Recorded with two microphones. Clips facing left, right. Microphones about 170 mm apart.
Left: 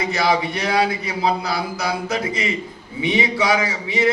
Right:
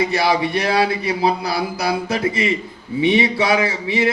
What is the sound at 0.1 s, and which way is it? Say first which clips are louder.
A man's voice: right 2 dB; 30° right (ahead or behind).